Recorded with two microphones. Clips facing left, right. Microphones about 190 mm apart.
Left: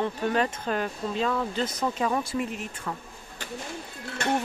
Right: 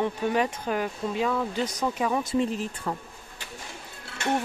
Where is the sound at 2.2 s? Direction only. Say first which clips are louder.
Right 4 dB; 25° right (ahead or behind).